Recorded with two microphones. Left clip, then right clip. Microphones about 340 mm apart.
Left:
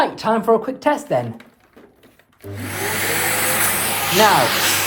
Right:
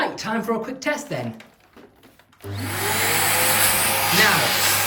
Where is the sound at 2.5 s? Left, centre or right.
Centre.